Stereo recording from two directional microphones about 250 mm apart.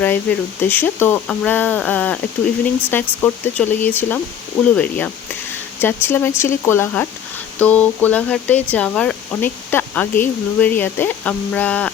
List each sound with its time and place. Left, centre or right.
0.0 s speech: centre